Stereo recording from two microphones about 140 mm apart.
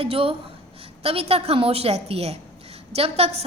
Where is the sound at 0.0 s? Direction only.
40° right (ahead or behind).